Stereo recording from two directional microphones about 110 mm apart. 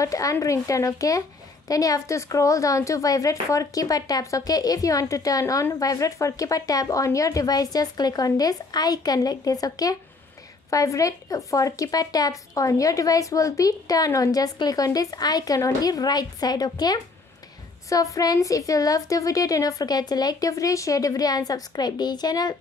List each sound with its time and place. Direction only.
0.0 s a woman's voice: 30° left (ahead or behind)